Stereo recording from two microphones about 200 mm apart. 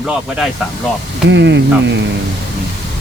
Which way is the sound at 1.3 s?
60° right (ahead or behind).